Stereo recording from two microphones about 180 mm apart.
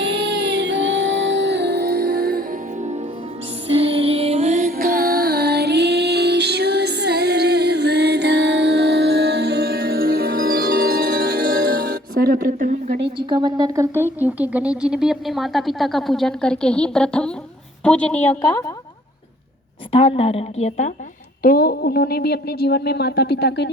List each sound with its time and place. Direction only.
0.0 s music: 75° right (ahead or behind); by 3.0 s 40° right (ahead or behind)
3.7 s music: 30° right (ahead or behind)
4.5 s music: 50° right (ahead or behind)
13.1 s a woman's voice: 25° right (ahead or behind); by 18.6 s 10° left (ahead or behind)
19.9 s a woman's voice: 35° left (ahead or behind)
21.4 s speech: 55° left (ahead or behind)